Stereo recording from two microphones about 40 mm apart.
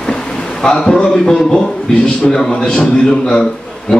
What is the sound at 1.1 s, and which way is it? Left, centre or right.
A man's voice, centre.